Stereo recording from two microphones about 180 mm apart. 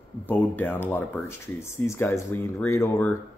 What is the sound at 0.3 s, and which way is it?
Speech, 10° left (ahead or behind).